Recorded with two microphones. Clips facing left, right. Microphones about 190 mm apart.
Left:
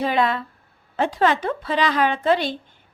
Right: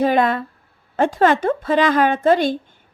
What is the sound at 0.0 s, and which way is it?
A woman's voice, 50° right (ahead or behind).